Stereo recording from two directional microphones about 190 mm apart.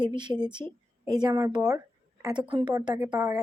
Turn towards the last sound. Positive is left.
turn(degrees=-5)  # may be behind; listen again after turning